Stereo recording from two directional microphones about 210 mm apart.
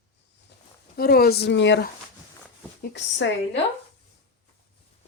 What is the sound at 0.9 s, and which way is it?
Speech, 45° left (ahead or behind).